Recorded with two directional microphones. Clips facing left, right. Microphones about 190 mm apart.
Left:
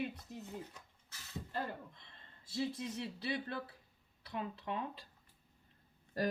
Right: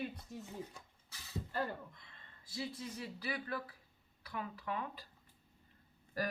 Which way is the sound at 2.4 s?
25° left (ahead or behind).